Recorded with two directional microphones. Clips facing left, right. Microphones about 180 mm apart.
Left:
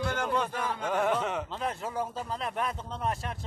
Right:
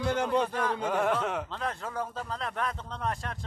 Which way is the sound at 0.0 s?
30° right (ahead or behind).